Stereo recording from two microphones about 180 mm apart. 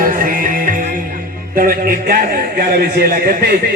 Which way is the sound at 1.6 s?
55° right (ahead or behind).